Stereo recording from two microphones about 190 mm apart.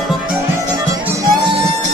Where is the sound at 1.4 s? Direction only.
25° right (ahead or behind).